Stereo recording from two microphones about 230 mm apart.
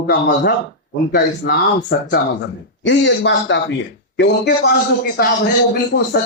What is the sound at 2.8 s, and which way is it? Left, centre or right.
A man's voice, left.